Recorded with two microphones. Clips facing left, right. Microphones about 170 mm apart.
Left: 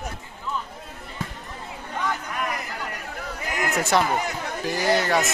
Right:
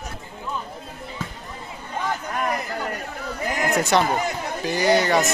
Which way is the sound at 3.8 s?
5° left (ahead or behind).